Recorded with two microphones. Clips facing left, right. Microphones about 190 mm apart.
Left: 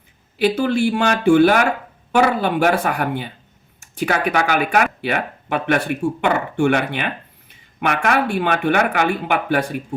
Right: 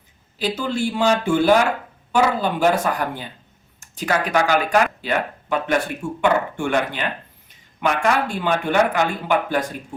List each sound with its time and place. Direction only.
0.3 s speech: 60° left (ahead or behind)
3.8 s a sound: 60° left (ahead or behind)
4.3 s speech: 60° left (ahead or behind)